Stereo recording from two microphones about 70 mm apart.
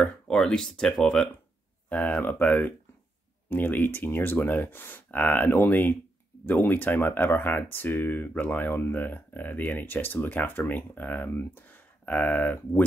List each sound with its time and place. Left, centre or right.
0.0 s speech: centre
1.9 s speech: left